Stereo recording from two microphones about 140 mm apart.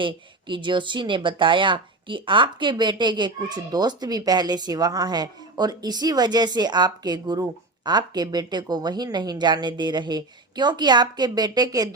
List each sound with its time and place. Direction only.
0.0 s a woman's voice: 35° right (ahead or behind)